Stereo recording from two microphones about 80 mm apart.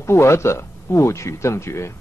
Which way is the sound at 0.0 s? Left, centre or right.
Left.